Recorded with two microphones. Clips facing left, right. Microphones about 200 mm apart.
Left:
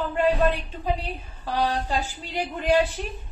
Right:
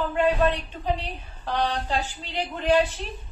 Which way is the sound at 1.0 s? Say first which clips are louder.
Even; 10° left (ahead or behind).